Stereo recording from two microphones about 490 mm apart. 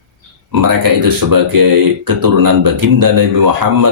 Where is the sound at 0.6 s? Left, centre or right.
Right.